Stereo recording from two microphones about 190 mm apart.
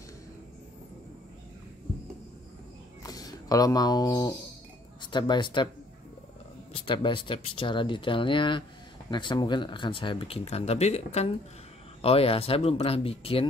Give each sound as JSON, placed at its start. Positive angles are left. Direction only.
{"t": 3.0, "sound": "a sound", "side_deg": 20}
{"t": 5.0, "sound": "speech", "side_deg": 25}
{"t": 6.7, "sound": "speech", "side_deg": 25}